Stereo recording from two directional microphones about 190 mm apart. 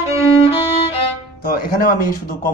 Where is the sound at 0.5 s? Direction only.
30° left (ahead or behind).